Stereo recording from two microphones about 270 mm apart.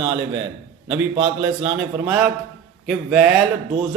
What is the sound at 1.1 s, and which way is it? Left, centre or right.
A man's voice, centre.